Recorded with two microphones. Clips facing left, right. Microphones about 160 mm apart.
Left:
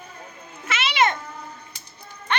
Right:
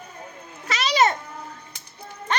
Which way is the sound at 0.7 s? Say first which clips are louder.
Right 2 dB; 40° right (ahead or behind).